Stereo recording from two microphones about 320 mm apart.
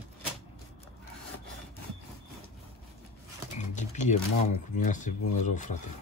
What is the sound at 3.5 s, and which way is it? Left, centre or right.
Music, left.